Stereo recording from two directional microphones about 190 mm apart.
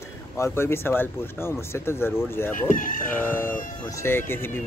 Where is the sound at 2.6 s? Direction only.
45° left (ahead or behind).